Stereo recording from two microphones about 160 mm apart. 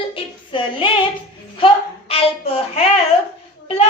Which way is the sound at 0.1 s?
35° left (ahead or behind).